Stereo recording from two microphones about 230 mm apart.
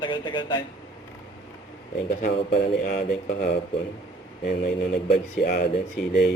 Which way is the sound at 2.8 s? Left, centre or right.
Left.